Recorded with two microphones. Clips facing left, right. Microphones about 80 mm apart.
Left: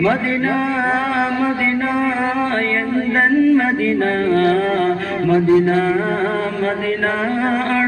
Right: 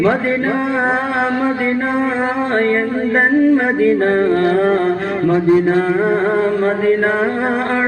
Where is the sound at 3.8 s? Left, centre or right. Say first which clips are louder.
Right 4 dB; right.